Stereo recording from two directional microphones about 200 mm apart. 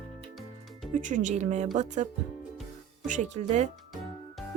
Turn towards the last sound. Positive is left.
turn(degrees=-35)  # may be behind; listen again after turning